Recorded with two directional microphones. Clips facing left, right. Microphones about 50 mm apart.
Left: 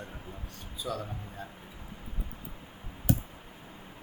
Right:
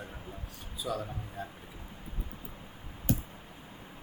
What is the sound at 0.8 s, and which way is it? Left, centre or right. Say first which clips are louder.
Speech: right 1 dB; centre.